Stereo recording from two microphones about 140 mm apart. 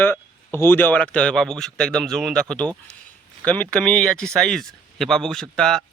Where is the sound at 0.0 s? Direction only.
15° left (ahead or behind).